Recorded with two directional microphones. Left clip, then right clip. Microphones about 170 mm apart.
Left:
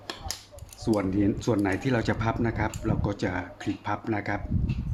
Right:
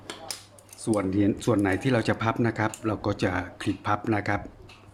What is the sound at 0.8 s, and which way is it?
Speech, 15° right (ahead or behind).